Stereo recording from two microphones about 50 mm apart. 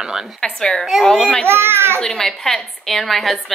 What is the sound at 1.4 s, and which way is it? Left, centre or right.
Speech, right.